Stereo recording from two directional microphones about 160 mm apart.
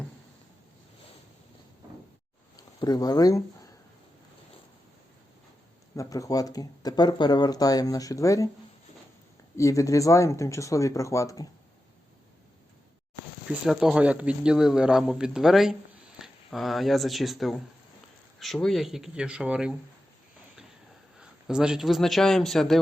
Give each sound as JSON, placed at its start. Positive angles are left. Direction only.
{"t": 2.6, "sound": "speech", "side_deg": 25}
{"t": 6.0, "sound": "speech", "side_deg": 20}
{"t": 9.6, "sound": "speech", "side_deg": 20}
{"t": 13.5, "sound": "speech", "side_deg": -5}
{"t": 21.2, "sound": "a man's voice", "side_deg": -5}